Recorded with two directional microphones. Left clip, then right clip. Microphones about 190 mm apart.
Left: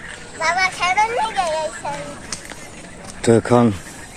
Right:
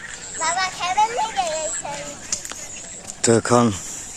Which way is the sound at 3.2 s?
15° right (ahead or behind).